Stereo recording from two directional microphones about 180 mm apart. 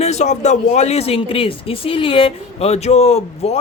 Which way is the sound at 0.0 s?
40° left (ahead or behind).